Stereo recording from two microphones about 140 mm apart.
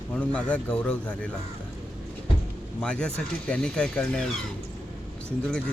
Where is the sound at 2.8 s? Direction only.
10° left (ahead or behind).